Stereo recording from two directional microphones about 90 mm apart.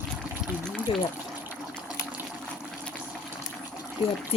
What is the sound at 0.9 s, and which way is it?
Speech, 75° left (ahead or behind).